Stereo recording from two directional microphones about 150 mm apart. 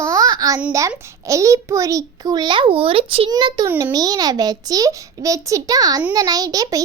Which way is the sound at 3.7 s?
15° right (ahead or behind).